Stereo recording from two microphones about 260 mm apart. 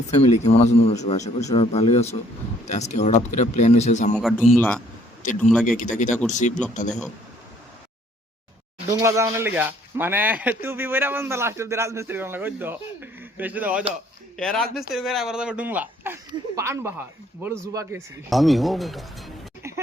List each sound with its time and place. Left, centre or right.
0.1 s speech: left
4.2 s speech: centre
5.6 s speech: left
8.9 s speech: centre
18.3 s speech: centre
19.6 s a sound: centre